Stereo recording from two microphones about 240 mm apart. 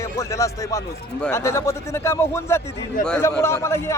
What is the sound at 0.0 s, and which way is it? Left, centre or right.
A man's voice, centre.